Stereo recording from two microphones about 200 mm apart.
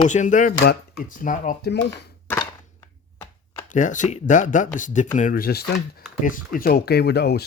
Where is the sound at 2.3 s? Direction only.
15° left (ahead or behind).